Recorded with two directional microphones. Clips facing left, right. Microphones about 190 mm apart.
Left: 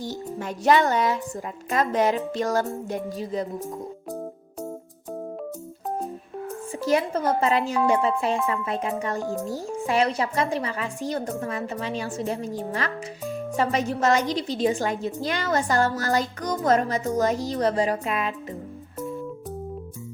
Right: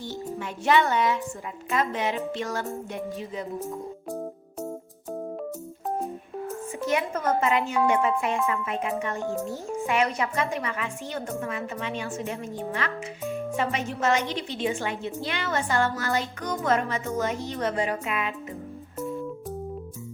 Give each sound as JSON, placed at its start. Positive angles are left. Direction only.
{"t": 0.0, "sound": "a woman's voice", "side_deg": 40}
{"t": 6.8, "sound": "a woman's voice", "side_deg": 35}